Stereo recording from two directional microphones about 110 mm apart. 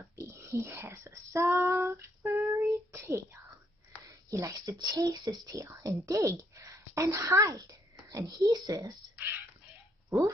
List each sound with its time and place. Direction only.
0.1 s whispering: 25° right (ahead or behind)
4.3 s speech: 30° right (ahead or behind)
10.0 s speech: 30° right (ahead or behind)